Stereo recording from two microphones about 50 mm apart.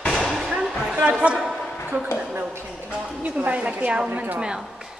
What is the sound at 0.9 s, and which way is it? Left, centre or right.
Speech, right.